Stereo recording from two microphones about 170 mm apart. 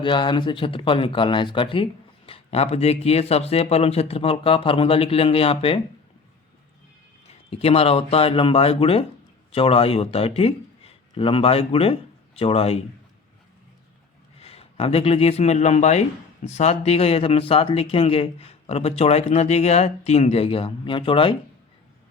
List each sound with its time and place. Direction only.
0.0 s speech: 30° left (ahead or behind)
7.5 s speech: 35° left (ahead or behind)
14.3 s speech: 35° left (ahead or behind)